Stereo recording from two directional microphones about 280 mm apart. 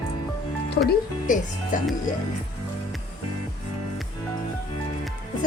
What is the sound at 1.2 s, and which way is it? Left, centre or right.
Speech, left.